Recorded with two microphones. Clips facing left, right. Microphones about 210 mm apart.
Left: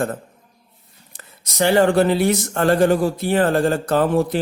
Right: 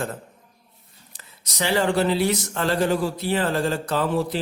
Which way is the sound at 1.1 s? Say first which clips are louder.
Left 6 dB; 50° left (ahead or behind).